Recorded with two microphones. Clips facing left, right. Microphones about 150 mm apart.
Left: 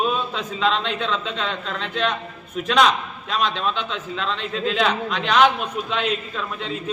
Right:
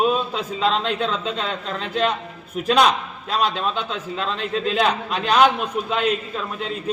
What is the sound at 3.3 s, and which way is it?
A man's voice, 35° right (ahead or behind).